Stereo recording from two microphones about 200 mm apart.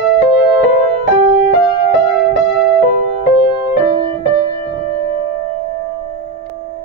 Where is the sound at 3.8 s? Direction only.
25° right (ahead or behind).